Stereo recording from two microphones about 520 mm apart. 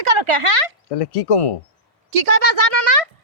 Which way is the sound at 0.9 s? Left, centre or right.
Left.